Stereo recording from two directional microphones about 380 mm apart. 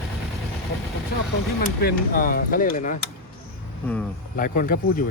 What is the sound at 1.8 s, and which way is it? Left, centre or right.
Speech, left.